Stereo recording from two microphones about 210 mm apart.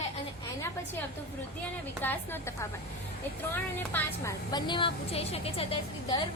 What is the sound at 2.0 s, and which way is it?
Speech, 10° left (ahead or behind).